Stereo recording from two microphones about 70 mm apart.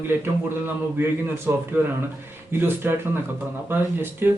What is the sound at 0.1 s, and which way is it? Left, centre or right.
A man's voice, right.